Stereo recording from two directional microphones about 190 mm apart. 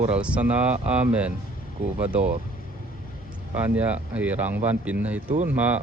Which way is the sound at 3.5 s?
10° right (ahead or behind).